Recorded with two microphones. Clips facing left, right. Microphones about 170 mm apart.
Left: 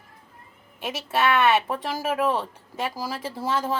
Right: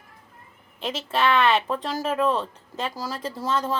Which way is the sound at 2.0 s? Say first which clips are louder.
Right 1 dB; 10° left (ahead or behind).